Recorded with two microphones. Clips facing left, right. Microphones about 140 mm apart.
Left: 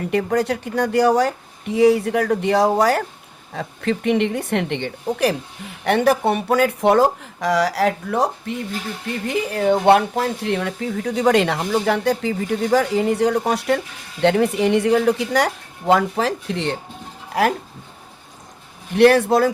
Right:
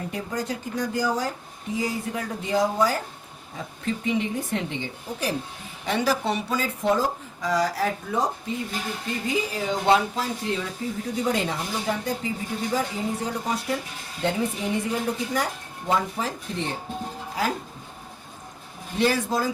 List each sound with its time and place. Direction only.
0.1 s speech: 70° left (ahead or behind)
18.9 s speech: 70° left (ahead or behind)